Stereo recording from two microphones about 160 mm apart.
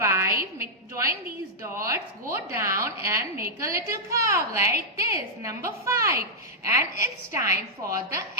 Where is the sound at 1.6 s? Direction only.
15° right (ahead or behind).